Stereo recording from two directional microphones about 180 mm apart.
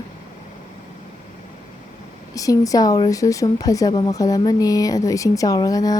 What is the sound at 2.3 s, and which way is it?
Speech, 20° left (ahead or behind).